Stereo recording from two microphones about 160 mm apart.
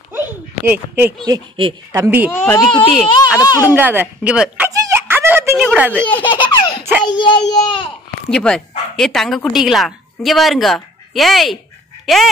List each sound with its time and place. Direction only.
0.1 s a sound: 15° right (ahead or behind)
1.2 s speech: 25° right (ahead or behind)
2.0 s speech: 10° right (ahead or behind)
2.3 s speech: 15° left (ahead or behind)
2.9 s speech: centre (ahead or behind)
3.3 s speech: 25° left (ahead or behind)
3.6 s speech: 10° right (ahead or behind)
4.8 s a sound: 15° right (ahead or behind)
5.6 s speech: 5° right (ahead or behind)
6.1 s a child's voice: 30° left (ahead or behind)
8.3 s speech: 5° left (ahead or behind)